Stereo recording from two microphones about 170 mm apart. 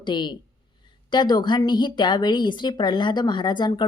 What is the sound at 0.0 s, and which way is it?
A woman's voice, 25° left (ahead or behind).